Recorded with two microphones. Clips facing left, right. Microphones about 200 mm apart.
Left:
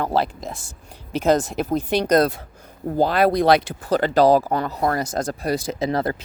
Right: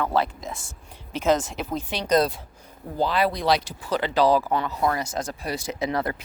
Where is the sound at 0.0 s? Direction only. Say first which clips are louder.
Left 2 dB; 35° left (ahead or behind).